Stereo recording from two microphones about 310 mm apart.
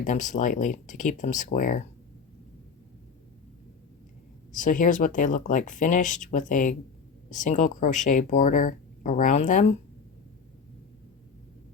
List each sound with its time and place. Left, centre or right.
0.0 s speech: left
4.5 s speech: left